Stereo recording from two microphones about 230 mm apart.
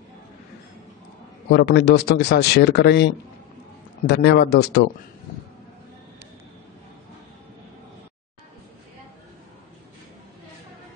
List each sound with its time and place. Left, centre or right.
1.5 s speech: left